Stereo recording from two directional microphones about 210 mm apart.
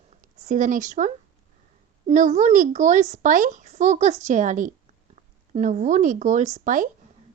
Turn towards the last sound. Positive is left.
turn(degrees=-40)  # may be behind; listen again after turning